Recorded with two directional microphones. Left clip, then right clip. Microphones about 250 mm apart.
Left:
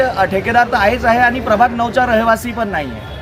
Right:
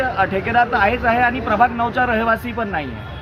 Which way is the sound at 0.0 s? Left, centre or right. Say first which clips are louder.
Left 4 dB; left.